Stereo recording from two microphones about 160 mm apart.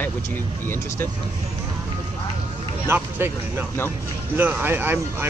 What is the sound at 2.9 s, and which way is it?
Speech, 15° right (ahead or behind).